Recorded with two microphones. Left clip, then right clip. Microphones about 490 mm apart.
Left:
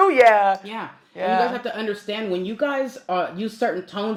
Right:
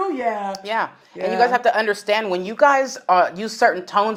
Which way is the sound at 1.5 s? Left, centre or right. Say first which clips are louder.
Right 9 dB; right.